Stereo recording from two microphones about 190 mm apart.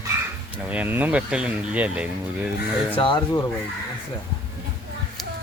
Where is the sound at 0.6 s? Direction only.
5° right (ahead or behind).